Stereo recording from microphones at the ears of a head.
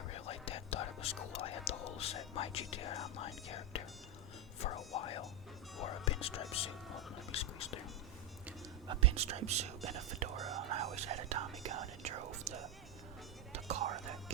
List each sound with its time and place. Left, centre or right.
0.1 s whispering: left
4.6 s music: left
5.7 s whispering: left
8.9 s speech: right
13.5 s music: right